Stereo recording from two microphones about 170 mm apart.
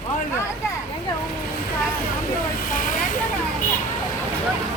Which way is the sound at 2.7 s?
55° left (ahead or behind).